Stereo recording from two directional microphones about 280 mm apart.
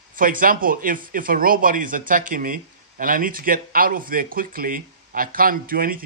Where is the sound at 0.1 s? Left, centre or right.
Right.